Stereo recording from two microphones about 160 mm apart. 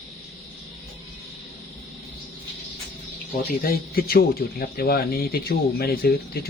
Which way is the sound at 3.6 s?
65° left (ahead or behind).